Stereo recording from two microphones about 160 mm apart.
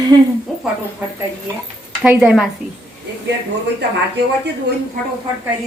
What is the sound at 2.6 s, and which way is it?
Speech, 55° right (ahead or behind).